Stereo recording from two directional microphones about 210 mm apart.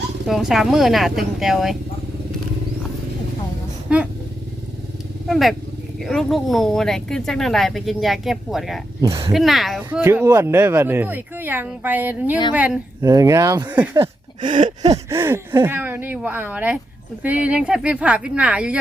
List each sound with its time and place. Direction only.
0.3 s speech: centre (ahead or behind)
3.8 s speech: 5° right (ahead or behind)
5.3 s speech: centre (ahead or behind)
9.0 s speech: 20° right (ahead or behind)
9.3 s speech: centre (ahead or behind)
13.0 s speech: 15° right (ahead or behind)
14.5 s a sound: 35° right (ahead or behind)
15.1 s speech: 10° right (ahead or behind)